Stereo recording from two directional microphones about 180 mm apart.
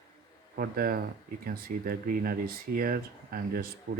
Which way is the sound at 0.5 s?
55° right (ahead or behind).